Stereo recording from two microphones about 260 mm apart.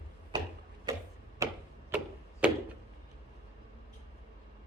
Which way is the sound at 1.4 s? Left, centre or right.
Centre.